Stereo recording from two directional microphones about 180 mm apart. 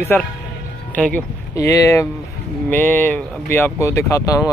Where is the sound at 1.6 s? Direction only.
20° left (ahead or behind).